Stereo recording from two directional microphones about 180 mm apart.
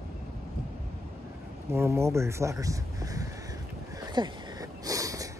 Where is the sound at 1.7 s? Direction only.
15° right (ahead or behind).